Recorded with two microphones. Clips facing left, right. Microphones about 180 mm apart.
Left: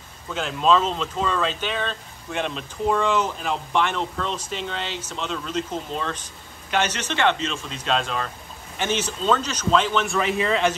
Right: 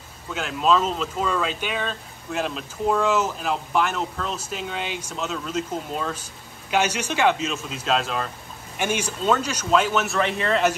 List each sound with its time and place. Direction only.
0.3 s speech: 5° right (ahead or behind)